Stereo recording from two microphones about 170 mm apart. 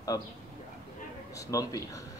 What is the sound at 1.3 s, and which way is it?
Speech, 20° left (ahead or behind).